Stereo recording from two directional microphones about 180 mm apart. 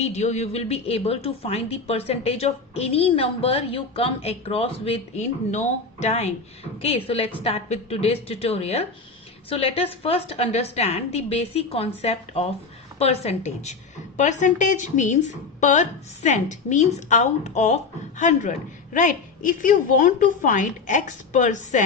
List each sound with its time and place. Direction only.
0.0 s a woman's voice: 40° left (ahead or behind)